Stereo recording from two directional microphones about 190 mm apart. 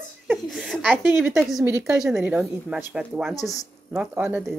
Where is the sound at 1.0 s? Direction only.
10° right (ahead or behind).